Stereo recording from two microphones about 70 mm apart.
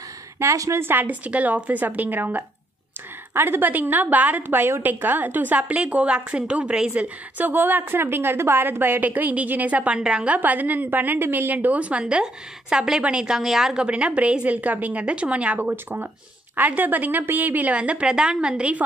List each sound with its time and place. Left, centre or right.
0.4 s a woman's voice: right; by 18.9 s centre